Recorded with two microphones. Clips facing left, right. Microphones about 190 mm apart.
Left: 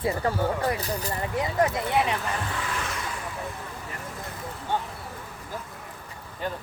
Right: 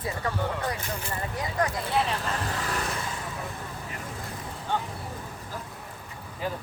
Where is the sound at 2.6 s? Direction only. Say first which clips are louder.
Right 1 dB; 40° right (ahead or behind).